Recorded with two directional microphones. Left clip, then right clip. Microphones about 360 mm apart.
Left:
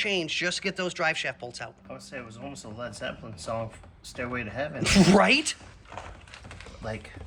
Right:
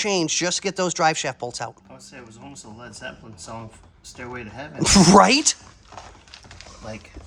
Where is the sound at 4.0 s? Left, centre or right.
Centre.